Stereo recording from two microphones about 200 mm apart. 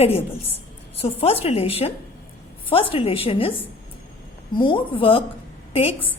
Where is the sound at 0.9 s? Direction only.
30° left (ahead or behind).